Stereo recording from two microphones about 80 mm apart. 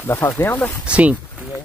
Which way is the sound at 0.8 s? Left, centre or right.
Centre.